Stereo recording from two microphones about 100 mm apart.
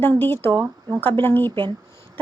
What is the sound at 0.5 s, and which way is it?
Speech, 40° right (ahead or behind).